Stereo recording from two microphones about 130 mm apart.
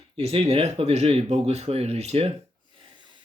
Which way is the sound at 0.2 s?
50° right (ahead or behind).